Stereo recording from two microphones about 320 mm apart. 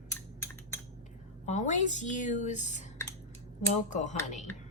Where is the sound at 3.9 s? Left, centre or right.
Left.